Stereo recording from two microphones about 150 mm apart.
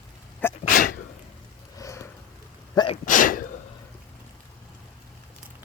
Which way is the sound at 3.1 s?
65° left (ahead or behind).